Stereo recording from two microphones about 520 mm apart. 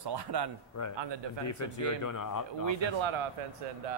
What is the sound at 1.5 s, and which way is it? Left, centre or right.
Speech, left.